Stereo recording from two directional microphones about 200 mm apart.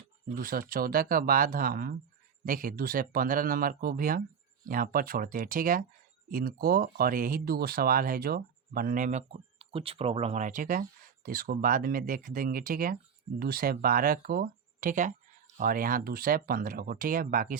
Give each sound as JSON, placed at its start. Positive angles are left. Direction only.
{"t": 0.3, "sound": "speech", "side_deg": -45}